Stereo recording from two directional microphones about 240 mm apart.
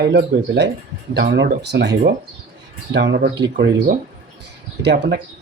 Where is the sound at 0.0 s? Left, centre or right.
Right.